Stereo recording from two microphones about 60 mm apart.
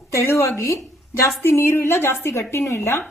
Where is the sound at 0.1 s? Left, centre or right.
Left.